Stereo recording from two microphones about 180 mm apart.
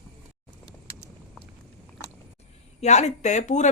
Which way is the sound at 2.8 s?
40° left (ahead or behind).